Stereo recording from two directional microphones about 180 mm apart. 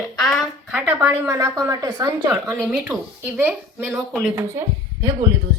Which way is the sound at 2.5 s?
Centre (ahead or behind).